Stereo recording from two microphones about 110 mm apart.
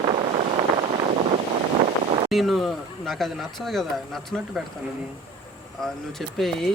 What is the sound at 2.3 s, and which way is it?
Speech, centre (ahead or behind).